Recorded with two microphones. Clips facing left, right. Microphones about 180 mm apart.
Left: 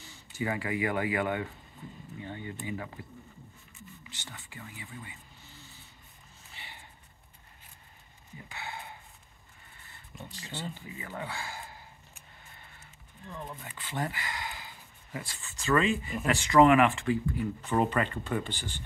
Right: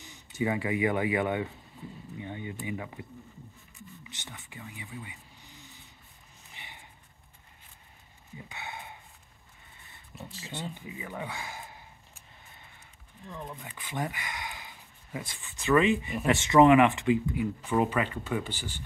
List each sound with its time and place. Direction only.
0.0 s speech: 20° right (ahead or behind)
6.5 s a sound: 20° right (ahead or behind)
8.5 s a sound: 20° right (ahead or behind)
10.1 s speech: 5° right (ahead or behind)
10.7 s speech: 20° right (ahead or behind)
13.3 s speech: 5° right (ahead or behind)
13.6 s speech: 15° right (ahead or behind)